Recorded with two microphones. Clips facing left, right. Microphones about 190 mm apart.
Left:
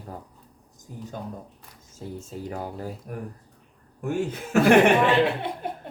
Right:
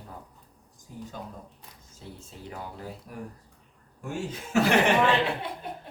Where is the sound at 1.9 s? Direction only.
45° left (ahead or behind).